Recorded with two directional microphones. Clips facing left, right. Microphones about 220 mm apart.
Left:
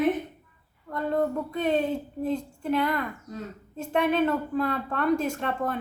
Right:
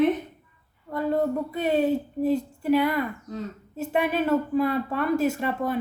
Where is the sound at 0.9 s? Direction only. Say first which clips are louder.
Right 2 dB; 5° right (ahead or behind).